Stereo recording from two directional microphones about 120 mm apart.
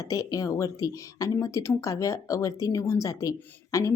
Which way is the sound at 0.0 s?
30° left (ahead or behind).